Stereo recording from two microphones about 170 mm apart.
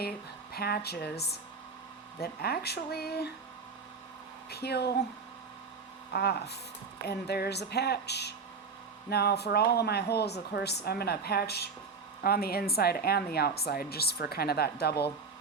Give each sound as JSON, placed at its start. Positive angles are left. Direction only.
{"t": 0.5, "sound": "speech", "side_deg": 65}
{"t": 4.4, "sound": "speech", "side_deg": 70}
{"t": 6.1, "sound": "a woman's voice", "side_deg": 70}